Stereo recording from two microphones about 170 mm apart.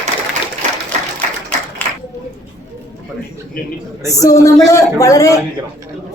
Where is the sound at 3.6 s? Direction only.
60° left (ahead or behind).